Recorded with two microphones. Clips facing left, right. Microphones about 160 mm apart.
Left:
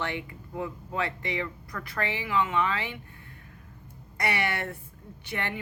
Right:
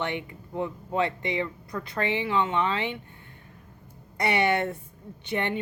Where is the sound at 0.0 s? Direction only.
20° right (ahead or behind).